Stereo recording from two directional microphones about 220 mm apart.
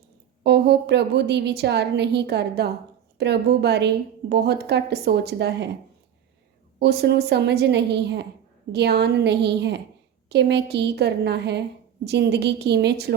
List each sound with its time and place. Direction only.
0.4 s a woman's voice: 50° right (ahead or behind)
6.7 s a woman's voice: 50° right (ahead or behind)